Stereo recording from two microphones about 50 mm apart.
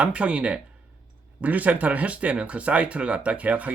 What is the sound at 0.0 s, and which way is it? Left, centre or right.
Speech, right.